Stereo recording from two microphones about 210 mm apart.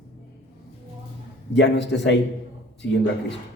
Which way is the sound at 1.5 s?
55° left (ahead or behind).